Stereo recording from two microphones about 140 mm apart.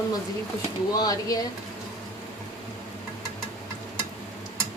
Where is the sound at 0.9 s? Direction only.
25° left (ahead or behind).